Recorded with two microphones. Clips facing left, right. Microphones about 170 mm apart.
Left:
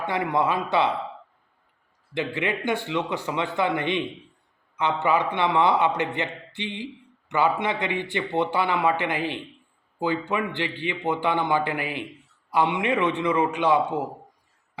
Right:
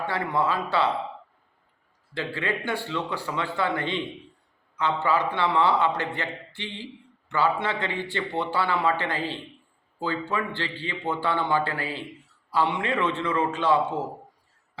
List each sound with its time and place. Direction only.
0.0 s a man's voice: 20° left (ahead or behind)
2.1 s a man's voice: 20° left (ahead or behind)